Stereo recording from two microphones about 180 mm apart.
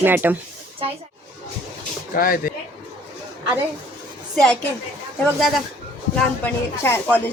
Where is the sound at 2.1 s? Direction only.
55° left (ahead or behind).